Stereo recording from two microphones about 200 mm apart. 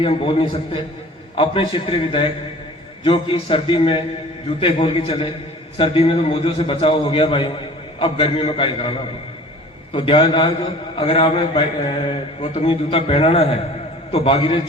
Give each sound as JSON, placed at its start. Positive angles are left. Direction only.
{"t": 0.0, "sound": "a man's voice", "side_deg": 25}